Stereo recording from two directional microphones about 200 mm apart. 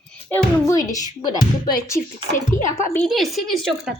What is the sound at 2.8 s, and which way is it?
A woman's voice, 5° left (ahead or behind).